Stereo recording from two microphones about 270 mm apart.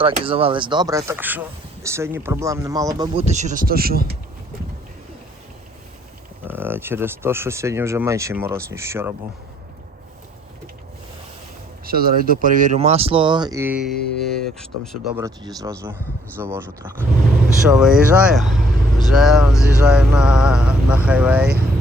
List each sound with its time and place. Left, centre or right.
0.0 s speech: centre
3.0 s speech: right
6.4 s speech: centre
11.9 s speech: right; by 14.1 s centre
14.2 s mantra: centre
15.1 s speech: centre
17.7 s mantra: centre